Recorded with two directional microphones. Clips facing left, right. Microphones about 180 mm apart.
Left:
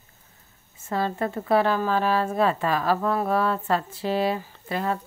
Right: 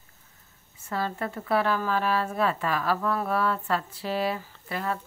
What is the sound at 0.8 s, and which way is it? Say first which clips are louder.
Speech: left 4 dB; 25° left (ahead or behind).